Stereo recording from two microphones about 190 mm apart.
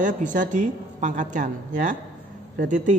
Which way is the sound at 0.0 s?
40° right (ahead or behind).